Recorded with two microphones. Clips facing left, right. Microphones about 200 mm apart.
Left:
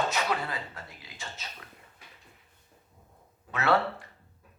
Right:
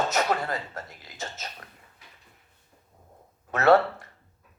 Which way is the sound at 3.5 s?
45° right (ahead or behind).